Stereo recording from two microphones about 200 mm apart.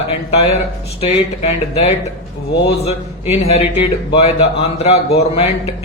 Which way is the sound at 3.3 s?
30° left (ahead or behind).